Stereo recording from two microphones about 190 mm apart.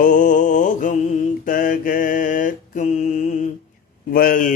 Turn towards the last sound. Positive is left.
turn(degrees=45)  # may be behind; listen again after turning